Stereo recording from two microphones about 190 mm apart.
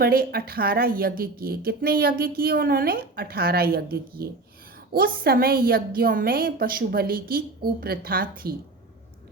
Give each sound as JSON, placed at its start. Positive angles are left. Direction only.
{"t": 0.0, "sound": "a woman's voice", "side_deg": -50}